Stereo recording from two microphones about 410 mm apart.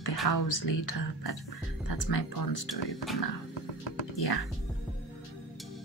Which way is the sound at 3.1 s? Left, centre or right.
Centre.